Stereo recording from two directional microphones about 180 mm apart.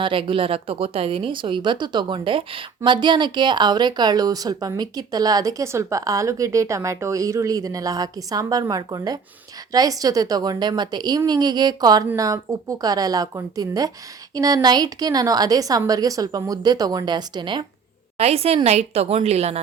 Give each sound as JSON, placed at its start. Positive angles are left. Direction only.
{"t": 0.0, "sound": "a woman's voice", "side_deg": -30}